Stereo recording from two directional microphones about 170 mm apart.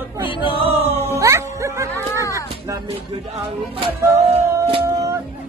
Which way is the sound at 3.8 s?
30° right (ahead or behind).